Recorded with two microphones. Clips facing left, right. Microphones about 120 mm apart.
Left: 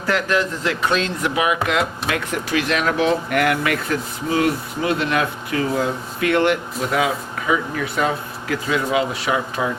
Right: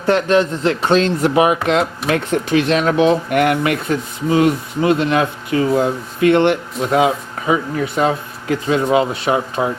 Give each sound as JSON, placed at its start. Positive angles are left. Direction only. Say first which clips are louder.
{"t": 0.0, "sound": "speech", "louder": "right 6 dB", "side_deg": -25}